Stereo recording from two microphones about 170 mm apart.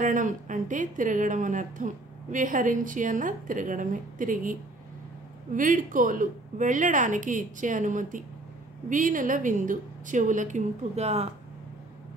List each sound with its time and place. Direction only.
0.0 s a woman's voice: 50° right (ahead or behind)